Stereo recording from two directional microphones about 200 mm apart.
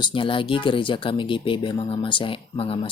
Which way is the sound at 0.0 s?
25° left (ahead or behind).